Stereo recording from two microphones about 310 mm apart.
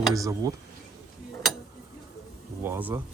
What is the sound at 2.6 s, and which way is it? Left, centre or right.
Speech, centre.